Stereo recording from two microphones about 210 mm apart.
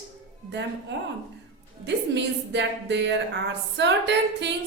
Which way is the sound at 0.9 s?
55° right (ahead or behind).